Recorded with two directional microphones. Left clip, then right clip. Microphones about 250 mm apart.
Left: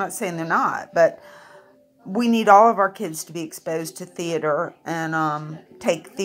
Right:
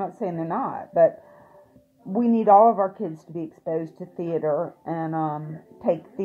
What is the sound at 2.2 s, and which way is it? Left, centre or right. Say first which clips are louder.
A woman's voice: left 2 dB; centre.